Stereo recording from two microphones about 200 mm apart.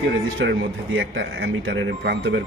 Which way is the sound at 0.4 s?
65° right (ahead or behind).